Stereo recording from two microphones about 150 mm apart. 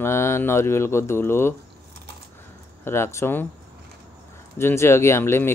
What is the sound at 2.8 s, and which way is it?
Speech, 15° left (ahead or behind).